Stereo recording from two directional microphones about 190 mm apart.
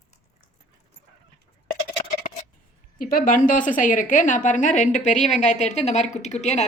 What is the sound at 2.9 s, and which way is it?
A woman's voice, 45° left (ahead or behind).